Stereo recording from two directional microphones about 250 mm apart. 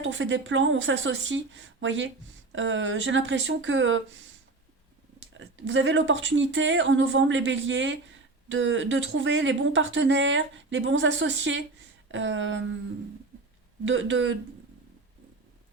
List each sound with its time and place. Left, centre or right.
0.0 s speech: right
5.3 s speech: right
13.8 s speech: right